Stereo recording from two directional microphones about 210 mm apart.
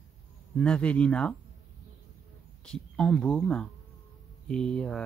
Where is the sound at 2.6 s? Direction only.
5° left (ahead or behind).